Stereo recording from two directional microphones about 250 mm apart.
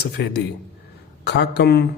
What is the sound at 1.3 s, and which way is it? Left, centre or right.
Mantra, left.